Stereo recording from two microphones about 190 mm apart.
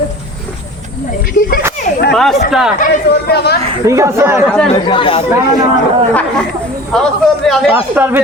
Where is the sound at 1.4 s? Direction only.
55° left (ahead or behind).